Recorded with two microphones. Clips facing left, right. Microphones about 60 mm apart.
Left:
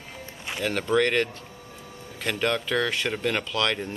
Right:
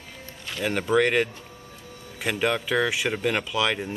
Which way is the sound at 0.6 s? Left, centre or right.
Centre.